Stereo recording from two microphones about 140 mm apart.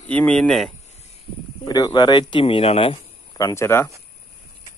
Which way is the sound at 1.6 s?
30° left (ahead or behind).